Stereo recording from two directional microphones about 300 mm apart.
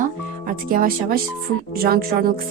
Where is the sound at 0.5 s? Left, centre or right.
Right.